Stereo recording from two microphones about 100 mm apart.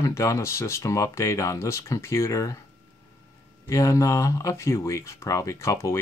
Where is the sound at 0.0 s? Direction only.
30° left (ahead or behind).